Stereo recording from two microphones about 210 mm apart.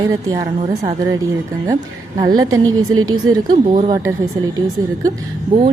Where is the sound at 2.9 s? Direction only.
80° right.